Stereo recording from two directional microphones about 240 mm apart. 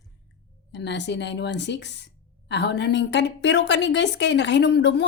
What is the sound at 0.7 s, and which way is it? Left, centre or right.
A woman's voice, left.